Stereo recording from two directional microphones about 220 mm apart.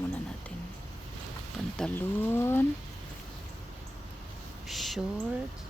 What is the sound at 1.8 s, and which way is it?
Speech, 5° left (ahead or behind).